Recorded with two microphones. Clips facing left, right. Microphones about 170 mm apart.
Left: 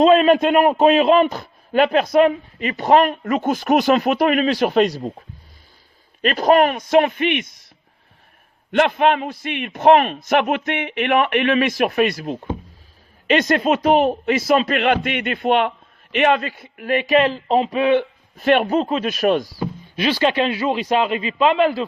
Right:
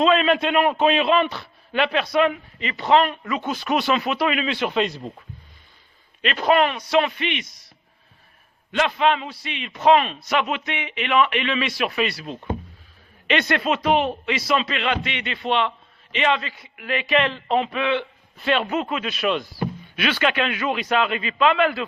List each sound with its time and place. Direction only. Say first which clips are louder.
0.0 s a man's voice: left 6 dB; 40° left (ahead or behind)
6.2 s a man's voice: left 4 dB; 40° left (ahead or behind)
8.7 s a man's voice: left 4 dB; 55° left (ahead or behind)
18.7 s a man's voice: left 6 dB; 35° left (ahead or behind)
19.0 s a man's voice: left 6 dB; 45° left (ahead or behind)